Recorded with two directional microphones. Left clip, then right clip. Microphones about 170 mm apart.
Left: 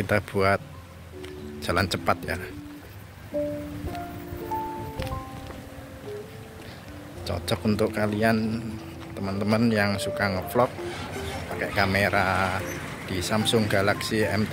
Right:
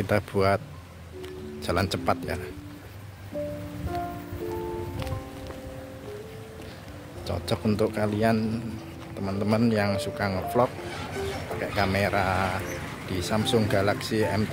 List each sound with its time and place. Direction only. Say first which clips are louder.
0.0 s speech: left 1 dB; 15° right (ahead or behind)
1.6 s speech: left 2 dB; 10° right (ahead or behind)
7.2 s a man's voice: left 1 dB; 10° right (ahead or behind)